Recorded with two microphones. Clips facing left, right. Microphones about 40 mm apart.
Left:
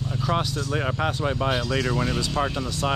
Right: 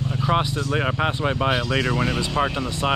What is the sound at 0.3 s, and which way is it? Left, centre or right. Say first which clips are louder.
Speech: right 3 dB; right.